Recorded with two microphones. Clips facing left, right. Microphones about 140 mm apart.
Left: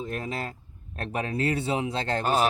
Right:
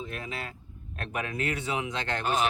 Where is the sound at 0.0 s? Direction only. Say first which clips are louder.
Left 5 dB; 40° left (ahead or behind).